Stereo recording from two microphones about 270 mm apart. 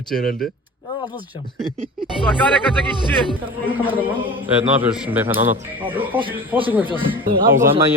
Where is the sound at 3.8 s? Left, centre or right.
Centre.